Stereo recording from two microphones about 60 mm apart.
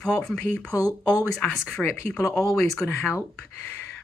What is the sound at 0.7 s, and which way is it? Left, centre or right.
Speech, left.